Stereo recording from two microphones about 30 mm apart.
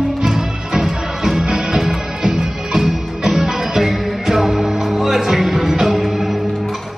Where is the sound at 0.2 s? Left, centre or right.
Centre.